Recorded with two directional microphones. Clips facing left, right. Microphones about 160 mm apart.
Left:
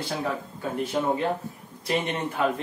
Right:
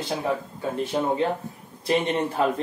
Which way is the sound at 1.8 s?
35° right (ahead or behind).